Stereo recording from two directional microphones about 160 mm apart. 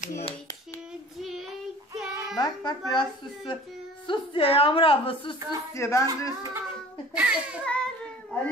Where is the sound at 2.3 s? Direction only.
25° left (ahead or behind).